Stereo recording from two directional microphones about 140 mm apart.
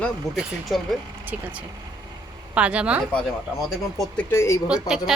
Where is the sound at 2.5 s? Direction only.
10° right (ahead or behind).